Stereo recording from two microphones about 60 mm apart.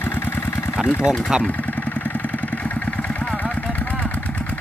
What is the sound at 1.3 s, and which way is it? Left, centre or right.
Speech, centre.